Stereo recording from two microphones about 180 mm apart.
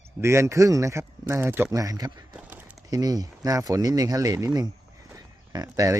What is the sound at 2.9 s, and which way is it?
Speech, 20° right (ahead or behind).